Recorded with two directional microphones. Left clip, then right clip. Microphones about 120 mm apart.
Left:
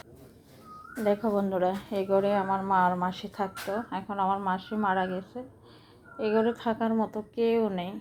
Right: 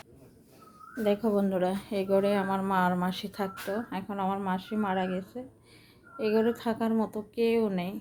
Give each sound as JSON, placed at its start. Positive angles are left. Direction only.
{"t": 1.0, "sound": "a woman's voice", "side_deg": -30}